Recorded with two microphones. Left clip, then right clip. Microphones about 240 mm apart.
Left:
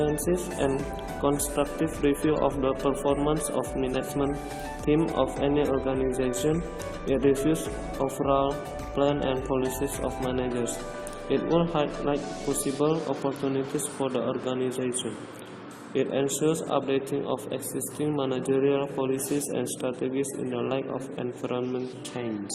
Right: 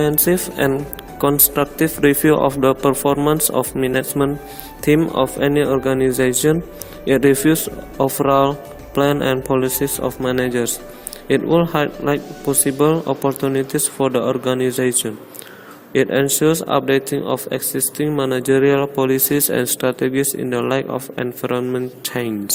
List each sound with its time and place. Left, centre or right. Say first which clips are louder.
1.2 s speech: right 9 dB; right